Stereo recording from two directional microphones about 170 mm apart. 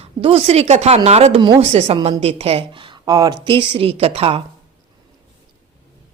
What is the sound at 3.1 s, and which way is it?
A woman's voice, 25° right (ahead or behind).